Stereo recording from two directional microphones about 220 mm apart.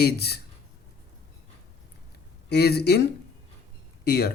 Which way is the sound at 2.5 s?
45° left (ahead or behind).